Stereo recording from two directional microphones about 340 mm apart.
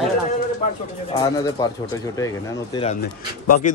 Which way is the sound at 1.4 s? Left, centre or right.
Centre.